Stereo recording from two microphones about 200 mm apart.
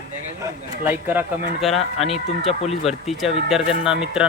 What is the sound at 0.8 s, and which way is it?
Speech, 10° right (ahead or behind).